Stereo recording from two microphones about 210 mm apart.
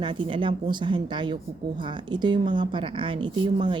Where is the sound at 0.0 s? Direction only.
25° right (ahead or behind).